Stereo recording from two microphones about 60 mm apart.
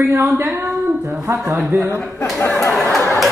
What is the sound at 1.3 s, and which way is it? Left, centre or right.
Speech, right.